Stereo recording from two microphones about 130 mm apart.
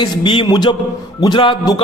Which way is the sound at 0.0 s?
40° left (ahead or behind).